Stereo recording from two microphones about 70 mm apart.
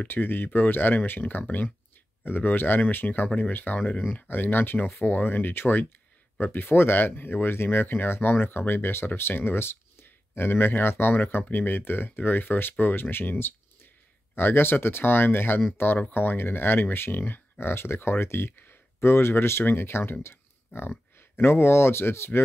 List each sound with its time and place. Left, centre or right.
0.0 s speech: left